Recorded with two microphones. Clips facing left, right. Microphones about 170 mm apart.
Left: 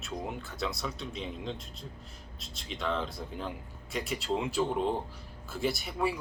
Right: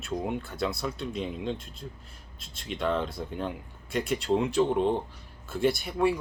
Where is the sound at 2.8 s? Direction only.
Centre (ahead or behind).